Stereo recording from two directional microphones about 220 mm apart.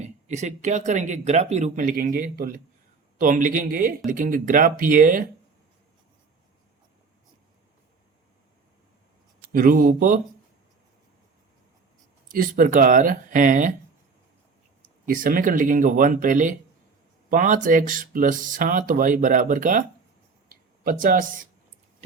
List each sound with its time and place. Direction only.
0.0 s speech: 30° right (ahead or behind)
9.4 s speech: 40° right (ahead or behind)
12.3 s speech: 40° right (ahead or behind)
15.0 s speech: 40° right (ahead or behind)
20.5 s a sound: 40° right (ahead or behind)